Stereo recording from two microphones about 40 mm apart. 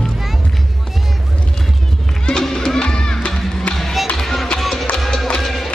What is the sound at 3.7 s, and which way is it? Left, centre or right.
Music, left.